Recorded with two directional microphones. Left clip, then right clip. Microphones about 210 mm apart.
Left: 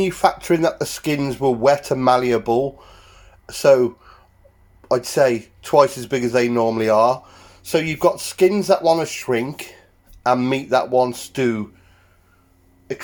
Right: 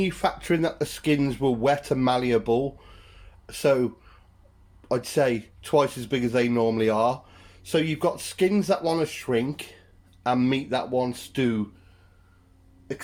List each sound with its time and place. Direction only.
0.0 s speech: 20° left (ahead or behind)